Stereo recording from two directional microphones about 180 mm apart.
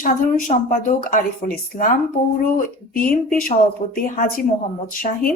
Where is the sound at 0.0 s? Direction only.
45° left (ahead or behind).